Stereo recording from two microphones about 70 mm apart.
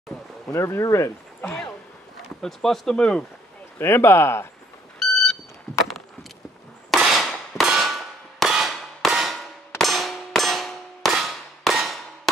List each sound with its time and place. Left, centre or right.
0.5 s speech: left
2.4 s speech: centre
3.7 s speech: left
4.9 s smoke detector: centre
7.0 s a sound: centre
7.6 s clang: centre